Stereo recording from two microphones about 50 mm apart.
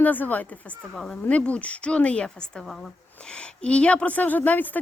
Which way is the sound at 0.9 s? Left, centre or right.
Centre.